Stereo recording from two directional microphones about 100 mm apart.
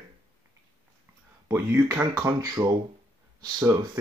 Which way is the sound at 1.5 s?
20° right (ahead or behind).